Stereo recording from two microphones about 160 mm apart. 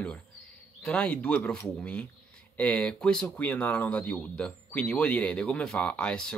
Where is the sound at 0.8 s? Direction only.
5° left (ahead or behind).